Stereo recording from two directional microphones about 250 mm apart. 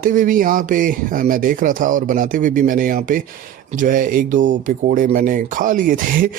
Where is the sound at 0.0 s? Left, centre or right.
Right.